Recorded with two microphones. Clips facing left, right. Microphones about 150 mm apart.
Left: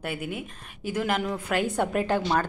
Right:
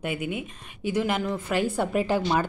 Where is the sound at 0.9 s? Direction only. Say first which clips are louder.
Right 1 dB; centre (ahead or behind).